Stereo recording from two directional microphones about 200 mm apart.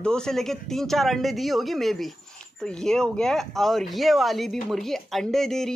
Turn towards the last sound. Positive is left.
turn(degrees=0)  # may be behind; listen again after turning